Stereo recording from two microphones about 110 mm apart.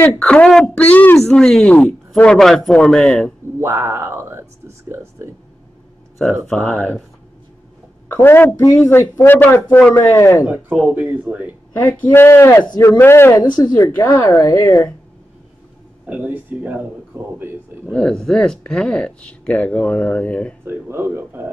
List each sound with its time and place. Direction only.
0.2 s speech: 10° left (ahead or behind)
3.5 s speech: 20° right (ahead or behind)
6.5 s speech: 10° left (ahead or behind)
8.1 s speech: 20° left (ahead or behind)
10.1 s speech: 25° left (ahead or behind)
10.4 s speech: 10° right (ahead or behind)
11.9 s speech: 15° left (ahead or behind)
16.1 s speech: 15° right (ahead or behind)
17.9 s speech: 5° left (ahead or behind)
20.6 s speech: 20° right (ahead or behind)